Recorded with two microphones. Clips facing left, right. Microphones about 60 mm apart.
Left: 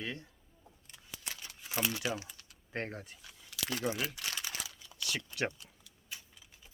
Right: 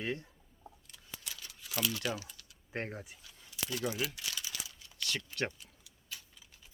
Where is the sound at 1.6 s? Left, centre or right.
Left.